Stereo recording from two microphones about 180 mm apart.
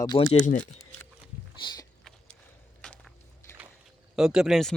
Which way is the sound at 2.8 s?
5° left (ahead or behind).